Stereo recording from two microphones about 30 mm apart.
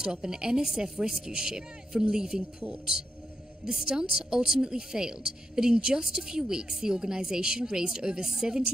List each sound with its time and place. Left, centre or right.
0.0 s a woman's voice: right
3.6 s a woman's voice: right